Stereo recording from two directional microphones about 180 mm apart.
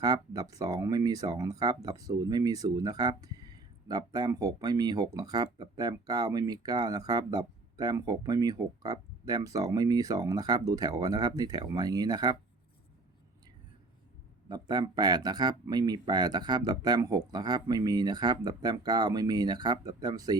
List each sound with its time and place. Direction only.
0.0 s speech: 20° right (ahead or behind)
14.4 s speech: 20° right (ahead or behind)